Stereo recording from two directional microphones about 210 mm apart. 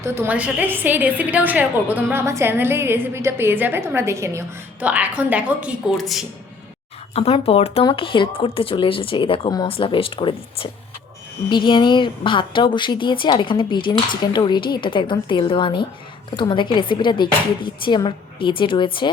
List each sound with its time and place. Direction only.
0.0 s a woman's voice: 10° right (ahead or behind)
7.1 s a woman's voice: 30° left (ahead or behind)